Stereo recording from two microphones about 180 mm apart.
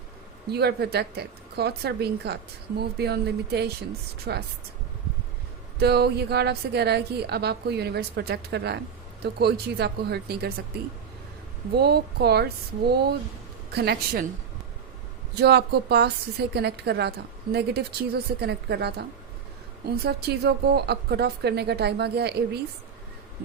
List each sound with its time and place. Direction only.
0.5 s a woman's voice: 65° right (ahead or behind)
5.8 s a woman's voice: 65° right (ahead or behind)
11.7 s a woman's voice: 65° right (ahead or behind)
15.4 s a woman's voice: 65° right (ahead or behind)